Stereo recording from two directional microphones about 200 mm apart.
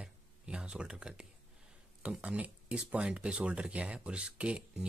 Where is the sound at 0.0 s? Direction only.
5° right (ahead or behind).